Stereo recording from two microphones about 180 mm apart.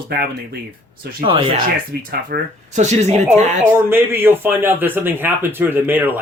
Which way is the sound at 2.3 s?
60° right (ahead or behind).